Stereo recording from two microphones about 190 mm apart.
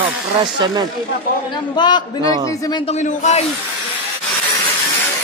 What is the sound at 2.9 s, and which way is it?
Speech, 35° left (ahead or behind).